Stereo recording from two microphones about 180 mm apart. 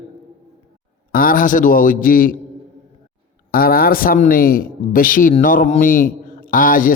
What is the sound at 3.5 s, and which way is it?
Speech, 55° left (ahead or behind).